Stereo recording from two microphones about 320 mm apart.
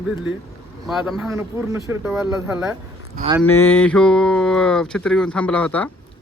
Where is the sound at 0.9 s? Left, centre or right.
Centre.